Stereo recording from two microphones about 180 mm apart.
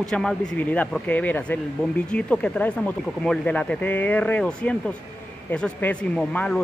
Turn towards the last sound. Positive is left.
turn(degrees=5)  # may be behind; listen again after turning